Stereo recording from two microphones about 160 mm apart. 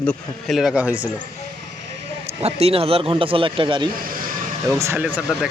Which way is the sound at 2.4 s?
40° right (ahead or behind).